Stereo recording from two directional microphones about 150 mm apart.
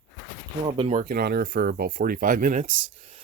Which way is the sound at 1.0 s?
85° right.